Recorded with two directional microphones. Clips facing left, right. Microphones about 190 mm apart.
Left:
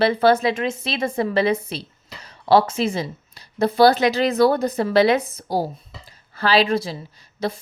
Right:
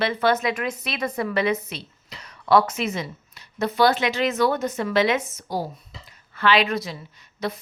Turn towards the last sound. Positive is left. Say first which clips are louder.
# left 3 dB
turn(degrees=30)  # may be behind; listen again after turning